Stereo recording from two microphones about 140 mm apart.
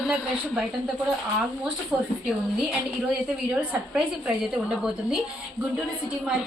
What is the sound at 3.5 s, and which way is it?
A woman's voice, 5° right (ahead or behind).